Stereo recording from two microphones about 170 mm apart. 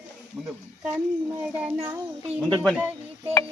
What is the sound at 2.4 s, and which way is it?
Speech, 5° left (ahead or behind).